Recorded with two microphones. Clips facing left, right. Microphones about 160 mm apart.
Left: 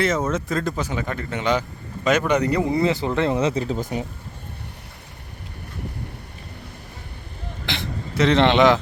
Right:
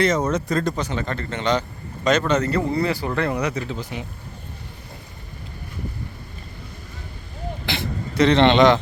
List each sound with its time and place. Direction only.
0.0 s speech: centre (ahead or behind); by 3.6 s 25° left (ahead or behind)
3.6 s speech: 40° left (ahead or behind)
7.7 s a man's voice: centre (ahead or behind)